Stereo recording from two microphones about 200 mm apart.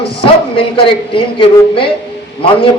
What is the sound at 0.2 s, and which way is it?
A man's voice, 25° left (ahead or behind).